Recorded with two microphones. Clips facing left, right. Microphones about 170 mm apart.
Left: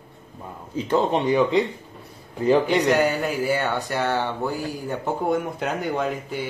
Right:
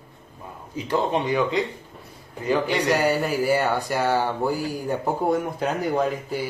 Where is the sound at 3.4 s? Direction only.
10° right (ahead or behind).